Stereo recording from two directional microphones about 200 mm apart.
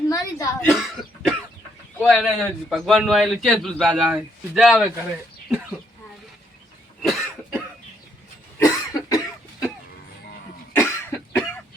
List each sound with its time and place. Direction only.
0.1 s a sound: 15° left (ahead or behind)
0.7 s cough: centre (ahead or behind)
2.0 s a man's voice: centre (ahead or behind)
7.0 s cough: centre (ahead or behind)
8.5 s cough: 15° left (ahead or behind)
10.8 s cough: 10° left (ahead or behind)